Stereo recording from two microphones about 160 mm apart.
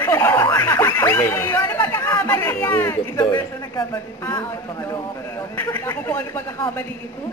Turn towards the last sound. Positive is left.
turn(degrees=15)  # may be behind; listen again after turning